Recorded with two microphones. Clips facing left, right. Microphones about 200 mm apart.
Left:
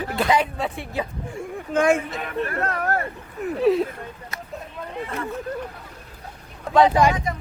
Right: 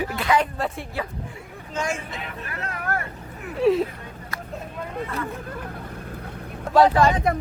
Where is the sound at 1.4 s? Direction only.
55° left (ahead or behind).